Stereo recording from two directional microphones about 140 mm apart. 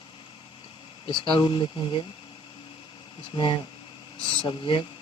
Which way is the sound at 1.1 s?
35° left (ahead or behind).